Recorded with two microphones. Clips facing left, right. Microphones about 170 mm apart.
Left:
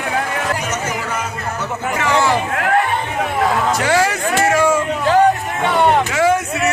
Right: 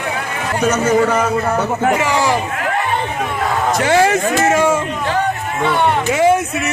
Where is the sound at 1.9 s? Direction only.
15° right (ahead or behind).